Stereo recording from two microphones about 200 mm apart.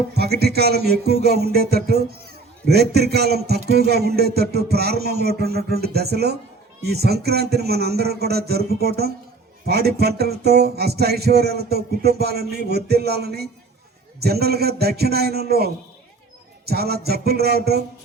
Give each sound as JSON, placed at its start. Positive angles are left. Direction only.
{"t": 0.1, "sound": "music", "side_deg": -55}